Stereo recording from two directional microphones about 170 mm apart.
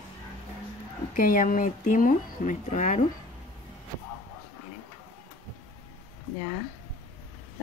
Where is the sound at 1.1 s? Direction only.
55° left (ahead or behind).